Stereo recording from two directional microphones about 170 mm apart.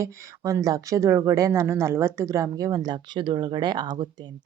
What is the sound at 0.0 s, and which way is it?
A woman's voice, 15° right (ahead or behind).